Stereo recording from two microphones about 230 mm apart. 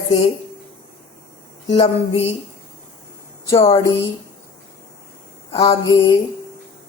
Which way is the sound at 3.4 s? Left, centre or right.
Left.